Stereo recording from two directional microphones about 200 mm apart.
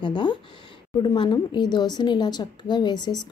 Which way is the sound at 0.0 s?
25° left (ahead or behind).